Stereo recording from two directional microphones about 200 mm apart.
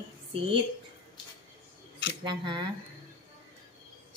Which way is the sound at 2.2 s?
25° right (ahead or behind).